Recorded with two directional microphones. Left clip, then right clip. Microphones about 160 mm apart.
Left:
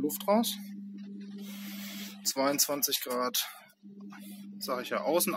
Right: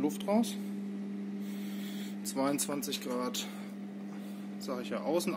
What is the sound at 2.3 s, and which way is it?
Speech, 20° right (ahead or behind).